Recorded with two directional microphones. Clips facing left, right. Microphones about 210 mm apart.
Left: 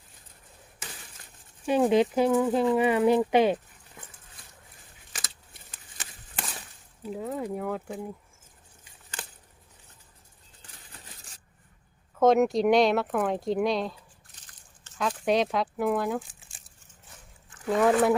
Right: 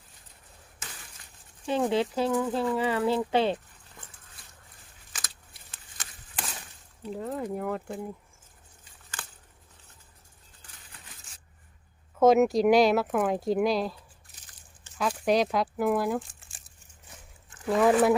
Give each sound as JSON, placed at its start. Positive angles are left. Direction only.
{"t": 1.6, "sound": "speech", "side_deg": 15}
{"t": 7.0, "sound": "speech", "side_deg": 5}
{"t": 12.2, "sound": "speech", "side_deg": -5}
{"t": 14.9, "sound": "speech", "side_deg": 0}